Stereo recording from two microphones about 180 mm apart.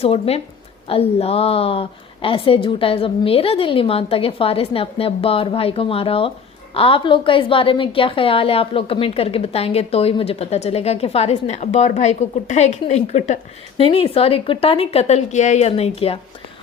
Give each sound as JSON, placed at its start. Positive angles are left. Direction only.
{"t": 0.0, "sound": "a woman's voice", "side_deg": 35}